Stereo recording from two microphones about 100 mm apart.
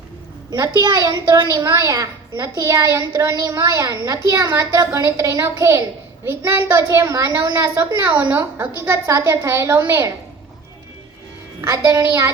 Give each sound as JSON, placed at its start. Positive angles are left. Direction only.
{"t": 0.5, "sound": "a woman's voice", "side_deg": -35}
{"t": 11.6, "sound": "a woman's voice", "side_deg": -30}